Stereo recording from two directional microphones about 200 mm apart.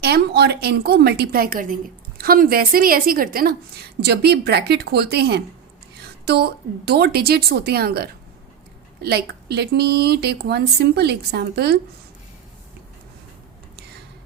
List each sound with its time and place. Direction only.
0.0 s a woman's voice: 55° right (ahead or behind)